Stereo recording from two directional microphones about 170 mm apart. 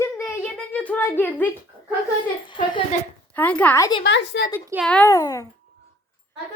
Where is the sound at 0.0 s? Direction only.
10° left (ahead or behind).